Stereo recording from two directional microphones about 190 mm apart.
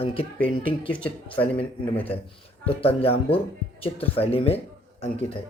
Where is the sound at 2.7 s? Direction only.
30° left (ahead or behind).